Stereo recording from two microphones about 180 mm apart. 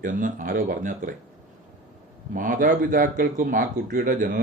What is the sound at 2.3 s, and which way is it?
Speech, 50° right (ahead or behind).